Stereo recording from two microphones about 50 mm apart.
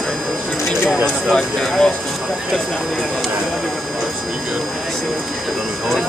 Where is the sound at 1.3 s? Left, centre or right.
Centre.